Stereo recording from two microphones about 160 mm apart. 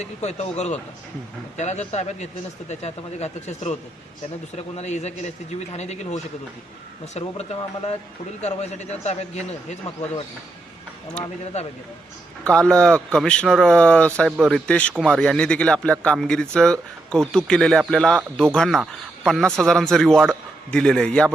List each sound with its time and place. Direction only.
0.0 s speech: 45° left (ahead or behind)
11.2 s speech: 5° left (ahead or behind)
12.5 s speech: 5° left (ahead or behind)